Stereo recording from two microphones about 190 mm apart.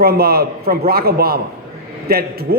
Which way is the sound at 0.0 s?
55° right (ahead or behind).